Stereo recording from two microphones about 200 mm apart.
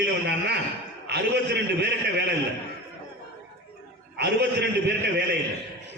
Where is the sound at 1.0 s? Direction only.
55° right (ahead or behind).